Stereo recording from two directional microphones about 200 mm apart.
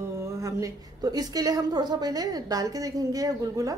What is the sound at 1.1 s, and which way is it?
Speech, 20° right (ahead or behind).